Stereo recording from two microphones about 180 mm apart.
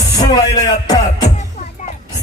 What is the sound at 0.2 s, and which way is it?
Speech, 20° left (ahead or behind).